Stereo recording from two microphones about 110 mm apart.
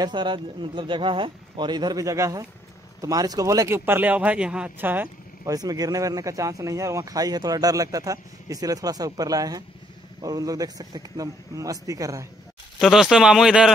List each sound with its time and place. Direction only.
0.0 s a man's voice: 45° right (ahead or behind); by 5.1 s 15° right (ahead or behind)
5.4 s speech: 35° right (ahead or behind)
12.7 s speech: centre (ahead or behind)